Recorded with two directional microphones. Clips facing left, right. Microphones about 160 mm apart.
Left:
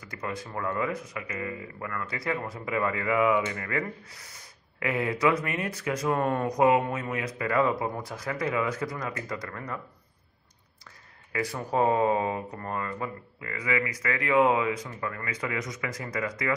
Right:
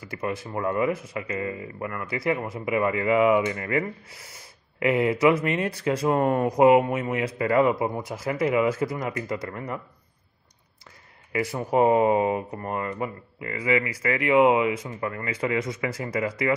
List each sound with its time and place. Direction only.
0.0 s speech: 25° right (ahead or behind)
11.3 s speech: 20° right (ahead or behind)